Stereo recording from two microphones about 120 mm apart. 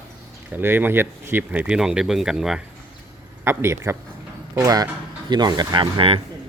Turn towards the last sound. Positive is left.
turn(degrees=-50)  # may be behind; listen again after turning